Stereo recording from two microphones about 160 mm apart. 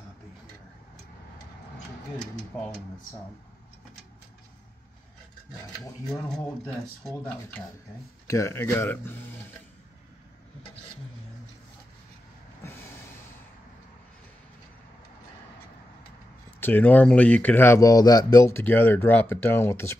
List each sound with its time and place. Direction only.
6.0 s speech: 5° left (ahead or behind)
16.5 s speech: 10° left (ahead or behind)